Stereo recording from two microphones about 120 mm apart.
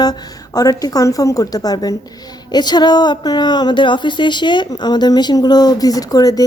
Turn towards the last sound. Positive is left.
turn(degrees=30)  # may be behind; listen again after turning